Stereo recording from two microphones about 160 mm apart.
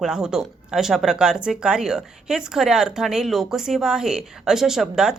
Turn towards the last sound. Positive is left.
turn(degrees=-5)  # may be behind; listen again after turning